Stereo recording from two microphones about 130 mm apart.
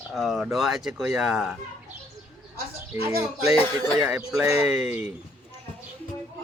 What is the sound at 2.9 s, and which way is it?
Speech, 15° right (ahead or behind).